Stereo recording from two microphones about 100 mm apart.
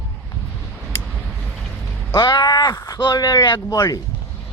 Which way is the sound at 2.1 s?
45° left (ahead or behind).